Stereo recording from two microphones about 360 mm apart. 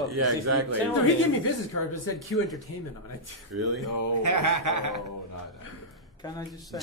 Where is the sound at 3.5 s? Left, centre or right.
Right.